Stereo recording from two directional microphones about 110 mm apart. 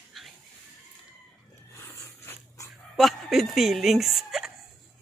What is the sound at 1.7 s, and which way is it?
Dog, 25° left (ahead or behind).